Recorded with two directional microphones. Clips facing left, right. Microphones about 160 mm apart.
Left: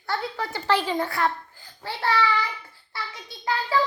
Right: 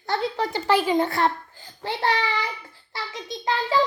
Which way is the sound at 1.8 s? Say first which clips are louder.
Even; 20° right (ahead or behind).